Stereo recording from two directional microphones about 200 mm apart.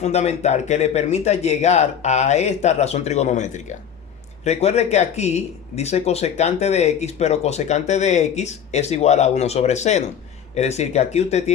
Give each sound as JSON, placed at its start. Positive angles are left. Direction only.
{"t": 0.0, "sound": "speech", "side_deg": 35}